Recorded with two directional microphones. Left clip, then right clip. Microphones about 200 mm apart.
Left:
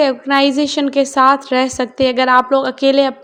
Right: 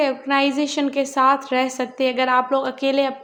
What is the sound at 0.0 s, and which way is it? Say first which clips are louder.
A woman's voice: left 6 dB; 30° left (ahead or behind).